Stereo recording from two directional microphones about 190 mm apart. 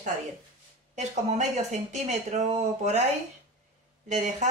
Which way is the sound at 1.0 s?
35° right (ahead or behind).